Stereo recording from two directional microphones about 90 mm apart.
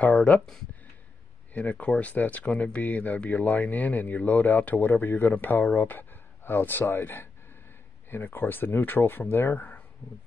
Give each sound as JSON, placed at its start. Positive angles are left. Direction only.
{"t": 0.0, "sound": "speech", "side_deg": 15}
{"t": 1.5, "sound": "speech", "side_deg": 15}